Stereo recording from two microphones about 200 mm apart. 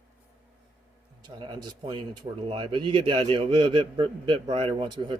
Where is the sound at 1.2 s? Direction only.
20° right (ahead or behind).